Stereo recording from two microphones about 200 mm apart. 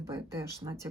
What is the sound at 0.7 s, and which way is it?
Speech, 15° right (ahead or behind).